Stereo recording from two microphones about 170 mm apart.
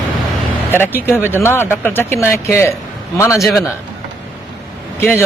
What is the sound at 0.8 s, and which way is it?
Speech, 10° left (ahead or behind).